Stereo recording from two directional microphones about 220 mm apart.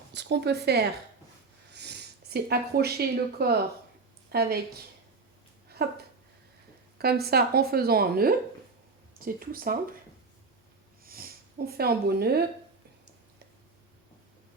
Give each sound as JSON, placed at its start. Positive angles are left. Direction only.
{"t": 0.1, "sound": "speech", "side_deg": -50}
{"t": 5.6, "sound": "a sound", "side_deg": -45}
{"t": 7.0, "sound": "speech", "side_deg": -45}
{"t": 11.0, "sound": "snort", "side_deg": -40}